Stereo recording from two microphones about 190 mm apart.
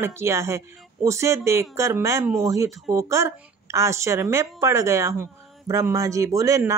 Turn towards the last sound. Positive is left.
turn(degrees=-15)  # may be behind; listen again after turning